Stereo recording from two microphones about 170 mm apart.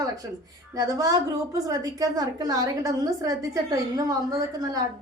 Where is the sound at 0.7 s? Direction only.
20° right (ahead or behind).